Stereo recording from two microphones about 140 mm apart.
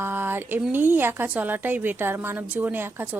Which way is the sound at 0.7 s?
15° right (ahead or behind).